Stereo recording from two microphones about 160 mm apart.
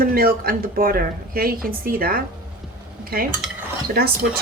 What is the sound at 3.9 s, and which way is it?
Speech, 75° right (ahead or behind).